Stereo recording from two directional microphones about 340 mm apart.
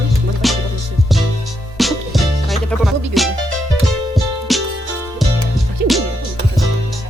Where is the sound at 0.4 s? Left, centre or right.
Centre.